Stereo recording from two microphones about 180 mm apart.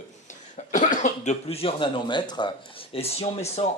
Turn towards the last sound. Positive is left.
turn(degrees=35)  # may be behind; listen again after turning